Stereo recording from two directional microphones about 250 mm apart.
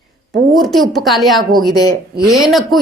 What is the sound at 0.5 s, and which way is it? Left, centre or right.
A woman's voice, centre.